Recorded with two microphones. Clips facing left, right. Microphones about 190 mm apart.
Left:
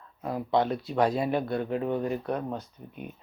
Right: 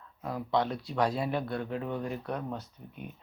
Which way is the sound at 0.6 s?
55° left (ahead or behind).